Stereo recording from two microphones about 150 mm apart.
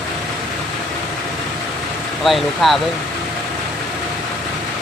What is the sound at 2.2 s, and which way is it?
Speech, centre (ahead or behind).